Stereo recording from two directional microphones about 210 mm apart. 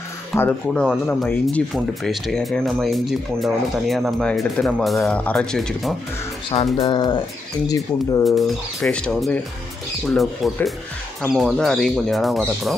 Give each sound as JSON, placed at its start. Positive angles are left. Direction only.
{"t": 0.4, "sound": "speech", "side_deg": 5}
{"t": 6.5, "sound": "speech", "side_deg": 30}
{"t": 8.2, "sound": "speech", "side_deg": 0}